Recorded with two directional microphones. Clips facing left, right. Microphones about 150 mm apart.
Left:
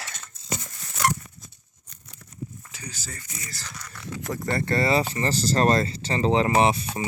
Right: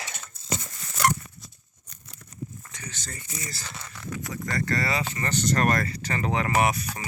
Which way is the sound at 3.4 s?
25° right (ahead or behind).